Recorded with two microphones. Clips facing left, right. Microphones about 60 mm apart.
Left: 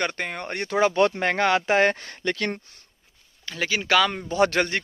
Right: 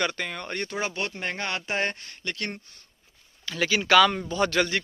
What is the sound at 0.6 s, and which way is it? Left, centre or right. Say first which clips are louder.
Speech: left 12 dB; left.